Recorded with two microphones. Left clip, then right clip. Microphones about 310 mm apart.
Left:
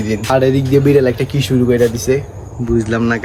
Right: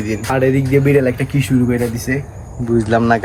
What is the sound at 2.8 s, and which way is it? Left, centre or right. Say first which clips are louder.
Speech: right 4 dB; centre.